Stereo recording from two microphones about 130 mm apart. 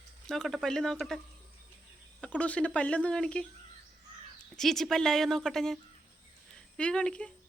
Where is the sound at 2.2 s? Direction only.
10° left (ahead or behind).